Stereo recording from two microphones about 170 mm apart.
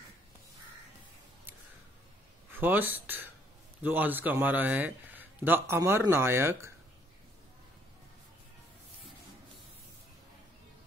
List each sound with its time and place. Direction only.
2.5 s a man's voice: 10° right (ahead or behind)